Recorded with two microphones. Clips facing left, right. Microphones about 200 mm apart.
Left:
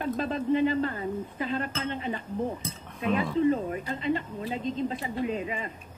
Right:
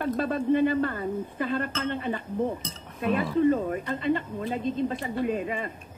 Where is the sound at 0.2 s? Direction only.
50° right (ahead or behind).